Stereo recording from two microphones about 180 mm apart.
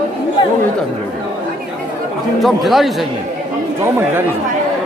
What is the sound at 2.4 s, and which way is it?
Speech, centre (ahead or behind).